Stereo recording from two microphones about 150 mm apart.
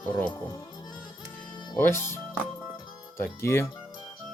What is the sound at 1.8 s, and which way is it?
Speech, 15° left (ahead or behind).